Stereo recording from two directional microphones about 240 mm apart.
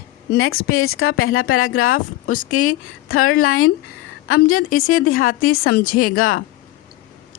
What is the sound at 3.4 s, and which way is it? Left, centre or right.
Speech, left.